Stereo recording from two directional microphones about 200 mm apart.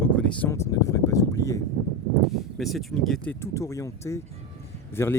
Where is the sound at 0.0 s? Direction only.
5° left (ahead or behind).